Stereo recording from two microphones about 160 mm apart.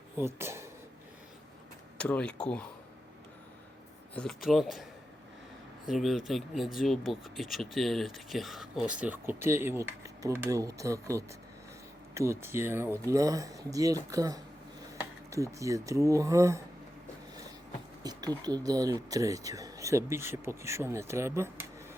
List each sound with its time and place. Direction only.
0.2 s speech: 15° right (ahead or behind)
2.0 s speech: 5° left (ahead or behind)
4.1 s speech: 5° left (ahead or behind); by 16.6 s 20° right (ahead or behind)
18.0 s speech: 25° right (ahead or behind)